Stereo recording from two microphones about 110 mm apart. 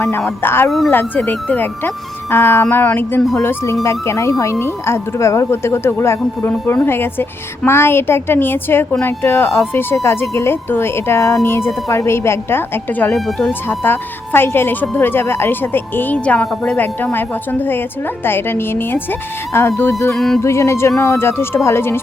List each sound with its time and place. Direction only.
0.3 s a woman's voice: 20° left (ahead or behind)
13.1 s speech: centre (ahead or behind)
13.5 s a woman's voice: 20° left (ahead or behind)
20.1 s speech: centre (ahead or behind)
20.4 s a woman's voice: 25° left (ahead or behind)